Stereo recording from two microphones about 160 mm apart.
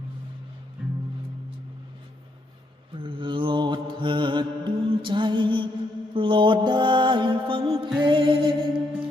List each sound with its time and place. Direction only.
3.0 s mantra: 30° right (ahead or behind)
6.1 s music: 30° right (ahead or behind)